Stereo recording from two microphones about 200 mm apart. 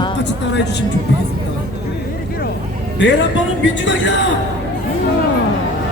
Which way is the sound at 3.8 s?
65° left (ahead or behind).